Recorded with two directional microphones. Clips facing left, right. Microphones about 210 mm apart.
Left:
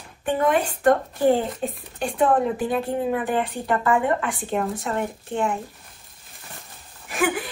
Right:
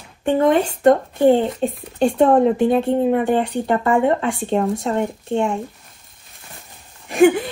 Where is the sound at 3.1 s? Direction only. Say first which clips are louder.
Right 6 dB; 25° right (ahead or behind).